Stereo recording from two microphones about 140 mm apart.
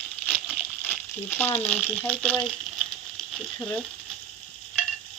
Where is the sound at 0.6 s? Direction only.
15° left (ahead or behind).